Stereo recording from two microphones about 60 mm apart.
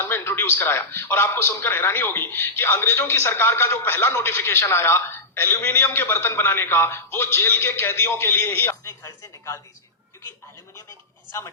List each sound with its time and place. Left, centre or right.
0.0 s a man's voice: left
11.3 s speech: left